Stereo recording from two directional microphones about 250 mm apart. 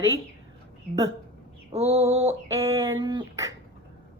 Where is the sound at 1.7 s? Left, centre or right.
Right.